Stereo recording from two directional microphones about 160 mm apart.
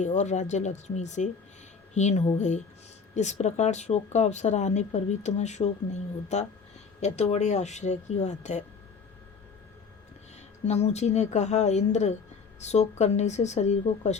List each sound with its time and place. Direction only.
0.0 s speech: 45° left (ahead or behind)
10.7 s speech: 45° left (ahead or behind)